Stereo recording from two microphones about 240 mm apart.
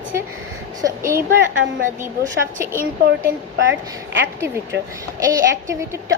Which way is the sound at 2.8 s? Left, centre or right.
Right.